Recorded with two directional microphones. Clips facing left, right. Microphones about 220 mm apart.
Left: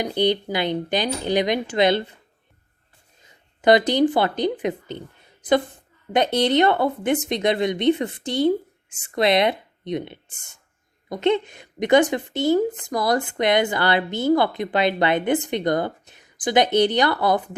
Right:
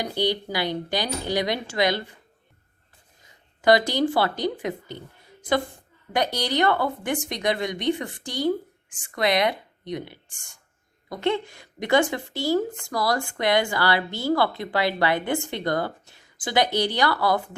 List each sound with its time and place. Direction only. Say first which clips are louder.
0.0 s a woman's voice: left 4 dB; 20° left (ahead or behind)
3.6 s a woman's voice: left 3 dB; 20° left (ahead or behind)